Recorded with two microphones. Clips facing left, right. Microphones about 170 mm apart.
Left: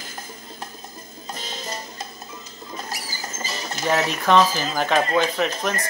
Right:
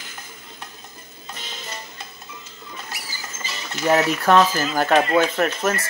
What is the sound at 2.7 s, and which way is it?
Rodents, 40° left (ahead or behind).